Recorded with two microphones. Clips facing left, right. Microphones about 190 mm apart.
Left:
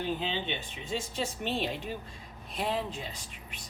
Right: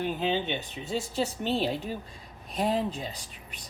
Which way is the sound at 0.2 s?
45° right (ahead or behind).